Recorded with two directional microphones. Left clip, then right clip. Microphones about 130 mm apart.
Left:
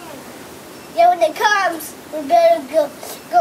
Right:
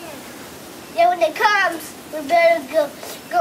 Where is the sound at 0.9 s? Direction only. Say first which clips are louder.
Left 3 dB; centre (ahead or behind).